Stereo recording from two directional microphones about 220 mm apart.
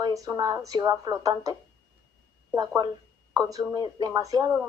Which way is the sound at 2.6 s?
20° right (ahead or behind).